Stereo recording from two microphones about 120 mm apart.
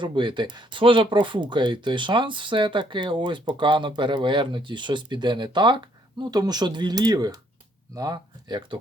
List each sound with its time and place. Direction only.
0.0 s speech: 40° right (ahead or behind)